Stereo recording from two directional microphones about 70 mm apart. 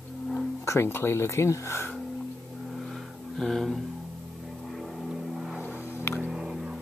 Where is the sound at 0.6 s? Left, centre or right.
Left.